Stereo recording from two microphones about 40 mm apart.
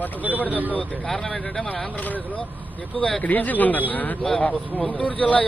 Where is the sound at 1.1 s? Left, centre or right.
Left.